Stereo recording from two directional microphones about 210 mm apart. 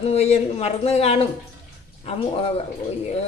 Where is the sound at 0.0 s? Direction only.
30° left (ahead or behind).